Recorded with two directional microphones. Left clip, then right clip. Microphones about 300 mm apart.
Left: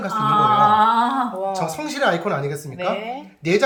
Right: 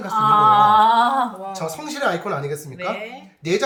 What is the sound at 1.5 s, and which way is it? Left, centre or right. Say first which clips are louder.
Speech: left 3 dB; centre.